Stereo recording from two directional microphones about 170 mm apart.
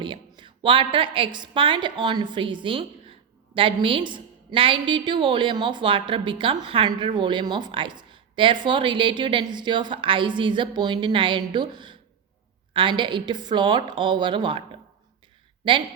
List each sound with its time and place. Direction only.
0.0 s a woman's voice: 30° right (ahead or behind)